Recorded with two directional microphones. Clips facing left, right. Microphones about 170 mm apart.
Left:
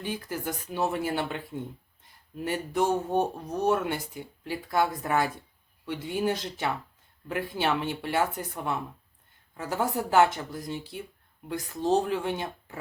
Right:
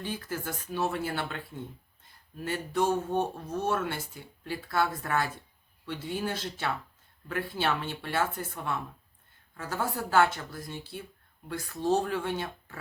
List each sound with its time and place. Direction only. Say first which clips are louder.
0.0 s speech: left 2 dB; 15° left (ahead or behind)